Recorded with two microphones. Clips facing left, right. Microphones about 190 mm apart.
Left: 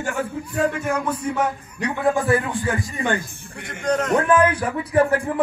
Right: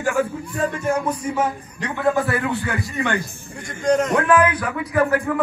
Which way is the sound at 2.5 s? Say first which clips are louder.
Even; 45° left (ahead or behind).